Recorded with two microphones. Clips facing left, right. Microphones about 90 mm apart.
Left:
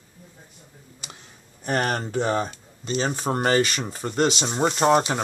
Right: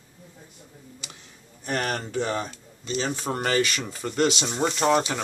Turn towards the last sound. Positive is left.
turn(degrees=35)  # may be behind; listen again after turning